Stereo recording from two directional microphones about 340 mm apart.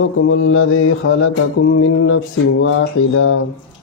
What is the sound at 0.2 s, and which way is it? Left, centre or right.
Speech, left.